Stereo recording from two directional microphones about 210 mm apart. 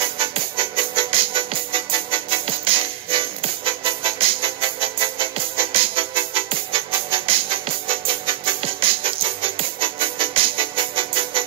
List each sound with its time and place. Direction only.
0.0 s music: 25° right (ahead or behind)